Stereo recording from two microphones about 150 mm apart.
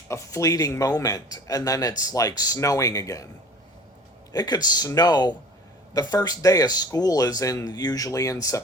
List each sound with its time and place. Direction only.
0.1 s speech: 20° left (ahead or behind)
4.3 s speech: 25° left (ahead or behind)